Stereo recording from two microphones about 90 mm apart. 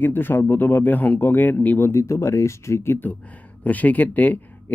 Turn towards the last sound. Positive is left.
turn(degrees=20)  # may be behind; listen again after turning